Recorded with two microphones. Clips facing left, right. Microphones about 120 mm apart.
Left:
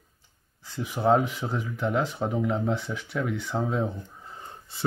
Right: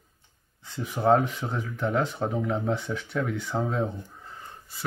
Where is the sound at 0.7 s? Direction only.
5° left (ahead or behind).